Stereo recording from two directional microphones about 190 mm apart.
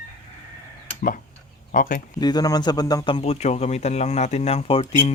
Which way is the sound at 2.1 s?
20° left (ahead or behind).